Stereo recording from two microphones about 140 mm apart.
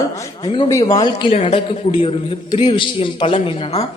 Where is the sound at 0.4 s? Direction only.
35° left (ahead or behind).